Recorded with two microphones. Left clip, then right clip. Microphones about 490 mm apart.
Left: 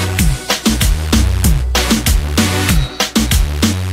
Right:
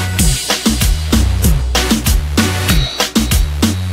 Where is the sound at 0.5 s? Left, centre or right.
Centre.